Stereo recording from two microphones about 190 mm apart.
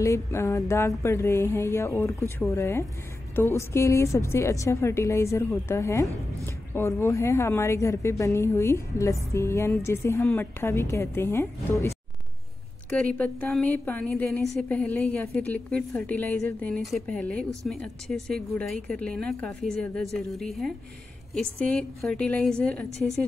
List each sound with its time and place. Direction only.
0.0 s a woman's voice: 15° left (ahead or behind)
12.9 s a woman's voice: 5° left (ahead or behind)